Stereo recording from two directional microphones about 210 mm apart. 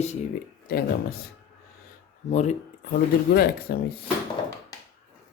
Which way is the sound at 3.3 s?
45° left (ahead or behind).